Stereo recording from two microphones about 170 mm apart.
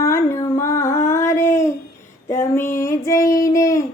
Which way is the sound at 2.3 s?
15° left (ahead or behind).